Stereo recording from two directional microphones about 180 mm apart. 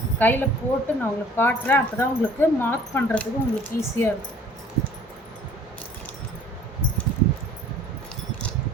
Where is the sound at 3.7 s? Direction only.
50° left (ahead or behind).